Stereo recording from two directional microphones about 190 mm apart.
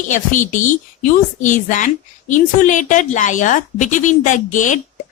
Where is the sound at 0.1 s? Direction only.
40° left (ahead or behind).